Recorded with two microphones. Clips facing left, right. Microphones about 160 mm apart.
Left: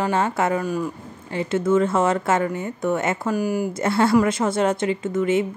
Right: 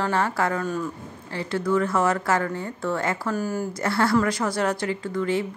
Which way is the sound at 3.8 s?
25° left (ahead or behind).